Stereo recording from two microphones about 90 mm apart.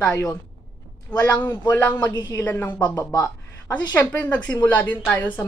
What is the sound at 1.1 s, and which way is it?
A woman's voice, 15° left (ahead or behind).